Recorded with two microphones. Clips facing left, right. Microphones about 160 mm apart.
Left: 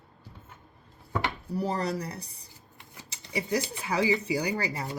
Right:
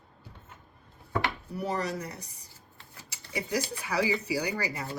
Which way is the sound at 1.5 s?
30° left (ahead or behind).